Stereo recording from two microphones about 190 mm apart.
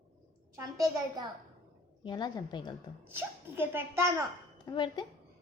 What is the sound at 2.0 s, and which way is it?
Speech, 20° left (ahead or behind).